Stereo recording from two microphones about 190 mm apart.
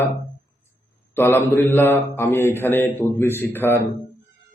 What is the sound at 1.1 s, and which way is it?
A man's voice, 10° left (ahead or behind).